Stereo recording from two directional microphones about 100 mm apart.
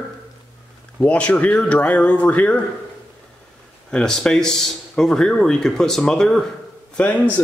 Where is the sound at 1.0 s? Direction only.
15° left (ahead or behind).